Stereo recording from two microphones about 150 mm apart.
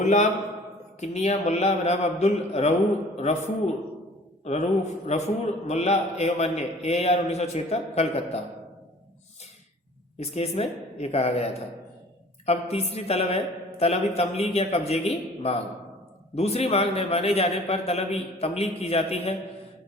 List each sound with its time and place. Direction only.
0.0 s a man's voice: 55° left (ahead or behind)
10.2 s a man's voice: 45° left (ahead or behind)